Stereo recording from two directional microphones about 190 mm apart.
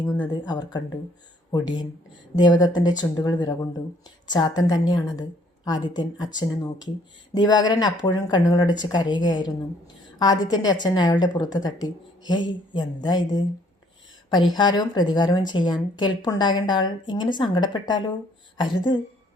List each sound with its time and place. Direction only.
0.0 s speech: 10° left (ahead or behind)
0.4 s speech: 20° left (ahead or behind)
14.5 s speech: 20° left (ahead or behind)